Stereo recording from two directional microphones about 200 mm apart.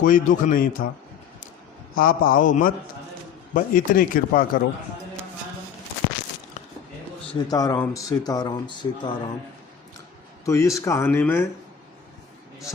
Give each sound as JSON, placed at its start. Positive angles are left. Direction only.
{"t": 0.0, "sound": "a man's voice", "side_deg": 40}
{"t": 2.0, "sound": "a man's voice", "side_deg": 45}
{"t": 7.4, "sound": "speech", "side_deg": 20}
{"t": 10.4, "sound": "speech", "side_deg": 15}